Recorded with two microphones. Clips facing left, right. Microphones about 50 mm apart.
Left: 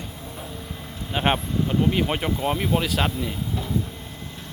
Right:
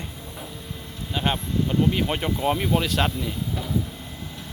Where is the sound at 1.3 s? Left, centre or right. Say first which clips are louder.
Even; centre.